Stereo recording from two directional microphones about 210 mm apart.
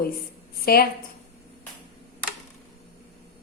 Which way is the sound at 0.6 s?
45° left (ahead or behind).